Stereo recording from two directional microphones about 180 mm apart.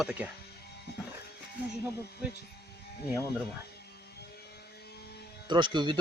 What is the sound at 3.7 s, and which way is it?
Mains hum, 65° left (ahead or behind).